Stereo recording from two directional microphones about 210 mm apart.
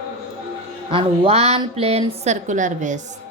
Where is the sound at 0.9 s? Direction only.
25° right (ahead or behind).